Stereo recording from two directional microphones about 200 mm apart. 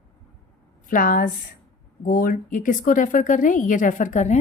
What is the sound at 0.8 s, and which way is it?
A woman's voice, 45° left (ahead or behind).